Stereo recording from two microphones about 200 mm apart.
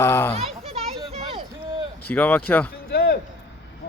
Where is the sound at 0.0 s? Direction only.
10° left (ahead or behind).